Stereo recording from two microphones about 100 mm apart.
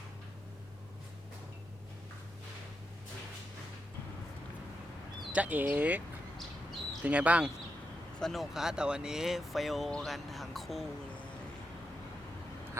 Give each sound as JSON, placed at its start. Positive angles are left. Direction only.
{"t": 5.3, "sound": "speech", "side_deg": -15}
{"t": 7.0, "sound": "speech", "side_deg": -15}
{"t": 8.2, "sound": "speech", "side_deg": 0}